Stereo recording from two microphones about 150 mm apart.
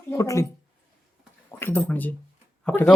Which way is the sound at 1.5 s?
15° left (ahead or behind).